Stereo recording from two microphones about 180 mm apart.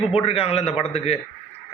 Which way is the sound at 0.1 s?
30° left (ahead or behind).